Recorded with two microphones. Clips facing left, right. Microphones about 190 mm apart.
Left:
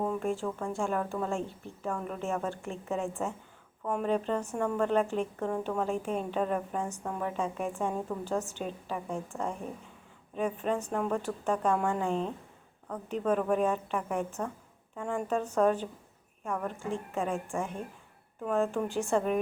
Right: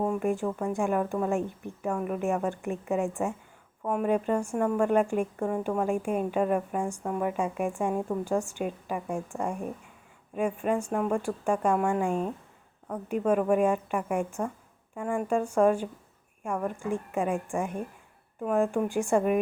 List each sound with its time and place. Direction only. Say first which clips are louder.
0.1 s a woman's voice: right 4 dB; 15° right (ahead or behind)